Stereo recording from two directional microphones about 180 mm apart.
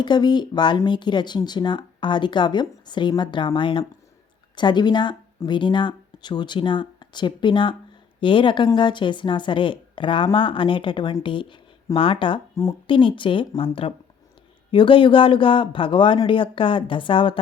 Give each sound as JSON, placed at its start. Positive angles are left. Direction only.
{"t": 0.0, "sound": "a woman's voice", "side_deg": 25}